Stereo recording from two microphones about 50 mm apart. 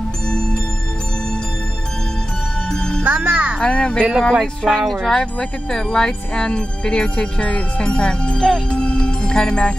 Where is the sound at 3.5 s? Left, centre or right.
Left.